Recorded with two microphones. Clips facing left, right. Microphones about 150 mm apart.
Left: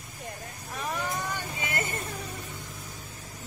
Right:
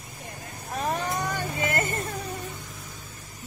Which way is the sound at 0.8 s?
45° right (ahead or behind).